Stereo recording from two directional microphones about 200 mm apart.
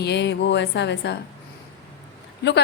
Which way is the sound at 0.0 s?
60° left (ahead or behind).